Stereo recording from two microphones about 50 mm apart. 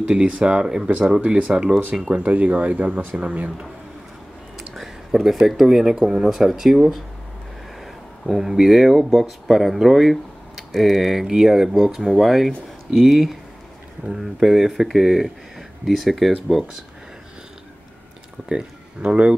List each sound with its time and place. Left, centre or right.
0.0 s speech: centre
1.2 s speech: right
1.5 s speech: centre
2.2 s speech: right
4.6 s speech: centre
18.5 s speech: centre